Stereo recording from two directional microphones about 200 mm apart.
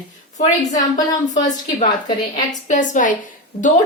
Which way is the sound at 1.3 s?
40° left (ahead or behind).